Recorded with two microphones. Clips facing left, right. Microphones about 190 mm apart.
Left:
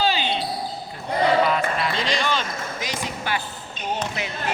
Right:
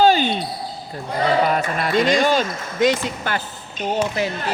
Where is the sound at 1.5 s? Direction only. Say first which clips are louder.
Right 2 dB; 50° right (ahead or behind).